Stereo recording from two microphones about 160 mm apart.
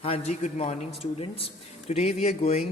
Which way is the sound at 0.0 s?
40° left (ahead or behind).